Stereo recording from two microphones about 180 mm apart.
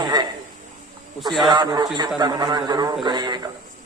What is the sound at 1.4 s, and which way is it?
A man's voice, 25° right (ahead or behind).